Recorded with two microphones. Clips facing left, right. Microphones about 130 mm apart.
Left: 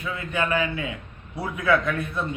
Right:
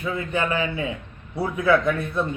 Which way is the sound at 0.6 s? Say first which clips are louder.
Right 2 dB; 30° right (ahead or behind).